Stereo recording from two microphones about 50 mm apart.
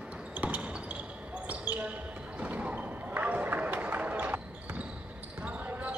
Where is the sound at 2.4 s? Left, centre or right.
Right.